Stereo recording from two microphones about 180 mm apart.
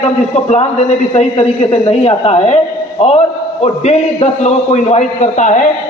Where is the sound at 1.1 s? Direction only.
35° left (ahead or behind).